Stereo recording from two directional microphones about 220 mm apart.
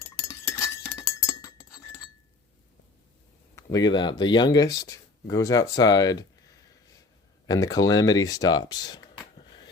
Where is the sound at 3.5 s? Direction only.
15° left (ahead or behind).